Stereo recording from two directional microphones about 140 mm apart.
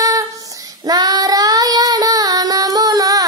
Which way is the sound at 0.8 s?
25° right (ahead or behind).